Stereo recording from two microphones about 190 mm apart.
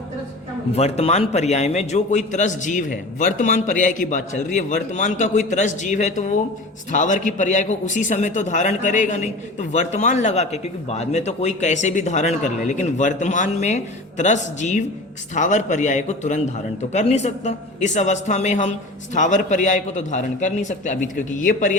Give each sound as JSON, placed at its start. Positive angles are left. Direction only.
{"t": 0.8, "sound": "a man's voice", "side_deg": 35}